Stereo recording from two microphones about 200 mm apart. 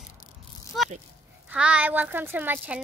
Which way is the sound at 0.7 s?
Centre (ahead or behind).